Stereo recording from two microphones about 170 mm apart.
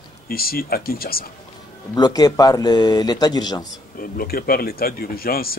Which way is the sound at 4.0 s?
60° left (ahead or behind).